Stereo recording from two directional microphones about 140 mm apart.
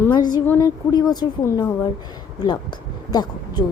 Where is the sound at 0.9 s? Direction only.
30° left (ahead or behind).